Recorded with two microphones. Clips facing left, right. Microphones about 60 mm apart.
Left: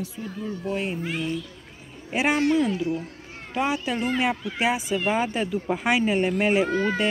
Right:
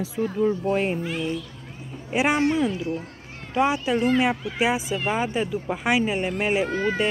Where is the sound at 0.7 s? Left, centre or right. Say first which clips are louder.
Right 5 dB; right.